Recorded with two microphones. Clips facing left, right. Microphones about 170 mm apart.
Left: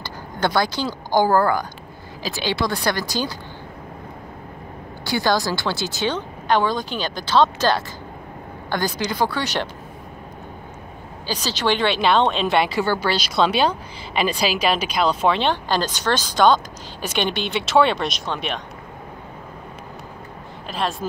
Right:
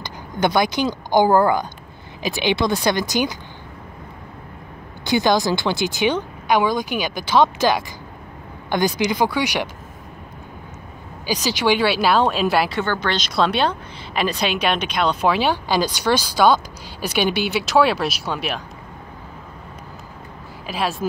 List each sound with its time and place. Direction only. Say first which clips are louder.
0.0 s speech: right 3 dB; 15° right (ahead or behind)
5.0 s speech: right 3 dB; 20° right (ahead or behind)
11.2 s speech: right 3 dB; 10° right (ahead or behind)
12.8 s speech: left 1 dB; 10° left (ahead or behind)
20.6 s speech: right 2 dB; 5° right (ahead or behind)